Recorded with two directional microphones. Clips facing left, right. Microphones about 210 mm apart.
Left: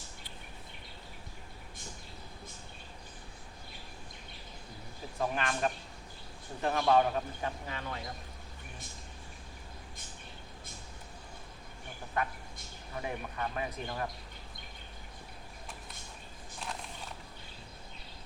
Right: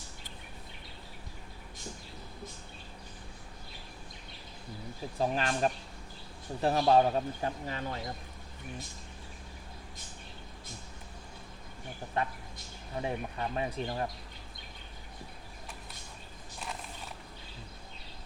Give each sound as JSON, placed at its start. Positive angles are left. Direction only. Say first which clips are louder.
{"t": 5.2, "sound": "a man's voice", "louder": "right 3 dB", "side_deg": -30}
{"t": 12.2, "sound": "speech", "louder": "right 1 dB", "side_deg": -25}